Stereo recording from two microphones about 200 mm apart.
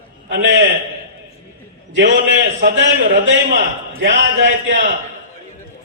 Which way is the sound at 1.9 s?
65° right (ahead or behind).